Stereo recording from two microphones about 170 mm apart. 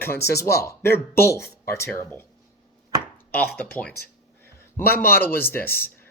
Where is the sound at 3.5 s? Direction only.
10° left (ahead or behind).